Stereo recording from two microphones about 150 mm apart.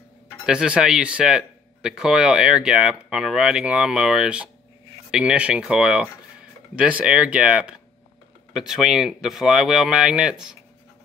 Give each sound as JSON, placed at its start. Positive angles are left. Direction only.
{"t": 0.5, "sound": "speech", "side_deg": -5}